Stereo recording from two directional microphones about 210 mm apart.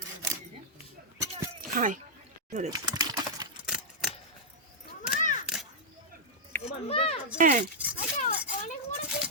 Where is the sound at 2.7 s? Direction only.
20° right (ahead or behind).